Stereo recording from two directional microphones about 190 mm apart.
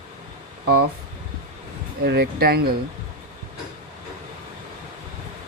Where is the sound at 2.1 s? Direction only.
55° right (ahead or behind).